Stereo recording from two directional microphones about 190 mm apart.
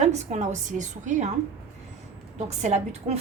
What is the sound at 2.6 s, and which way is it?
Speech, 35° right (ahead or behind).